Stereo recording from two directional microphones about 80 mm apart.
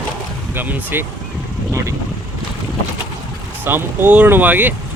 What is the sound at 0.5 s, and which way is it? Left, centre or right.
Speech, right.